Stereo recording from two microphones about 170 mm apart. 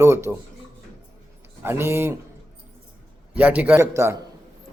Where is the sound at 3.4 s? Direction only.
10° right (ahead or behind).